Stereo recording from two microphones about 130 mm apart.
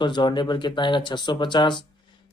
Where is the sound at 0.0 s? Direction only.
35° left (ahead or behind).